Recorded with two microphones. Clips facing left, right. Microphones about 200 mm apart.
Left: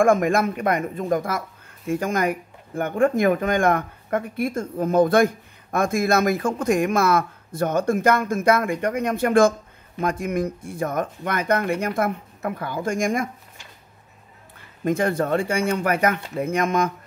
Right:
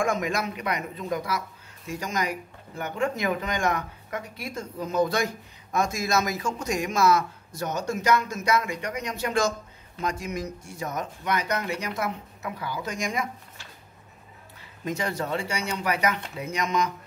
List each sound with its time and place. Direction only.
0.0 s speech: 50° left (ahead or behind)
14.9 s speech: 55° left (ahead or behind)